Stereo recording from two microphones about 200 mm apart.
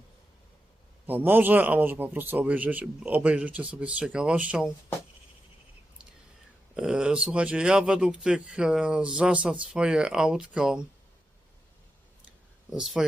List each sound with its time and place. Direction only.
1.0 s a man's voice: 10° right (ahead or behind)
6.7 s speech: 5° right (ahead or behind)
12.7 s speech: centre (ahead or behind)